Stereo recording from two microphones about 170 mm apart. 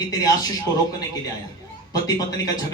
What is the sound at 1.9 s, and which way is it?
Speech, 20° left (ahead or behind).